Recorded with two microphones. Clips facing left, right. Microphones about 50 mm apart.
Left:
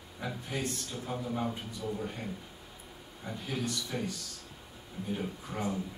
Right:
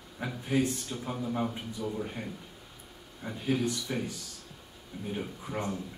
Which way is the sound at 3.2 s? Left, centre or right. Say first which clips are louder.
Right 6 dB; centre.